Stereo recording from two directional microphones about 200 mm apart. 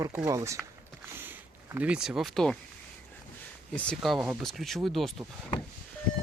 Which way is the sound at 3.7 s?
5° left (ahead or behind).